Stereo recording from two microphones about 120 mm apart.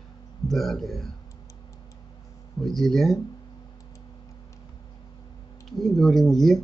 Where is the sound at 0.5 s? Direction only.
Centre (ahead or behind).